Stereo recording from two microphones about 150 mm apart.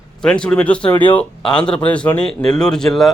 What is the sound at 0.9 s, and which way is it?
Speech, 35° left (ahead or behind).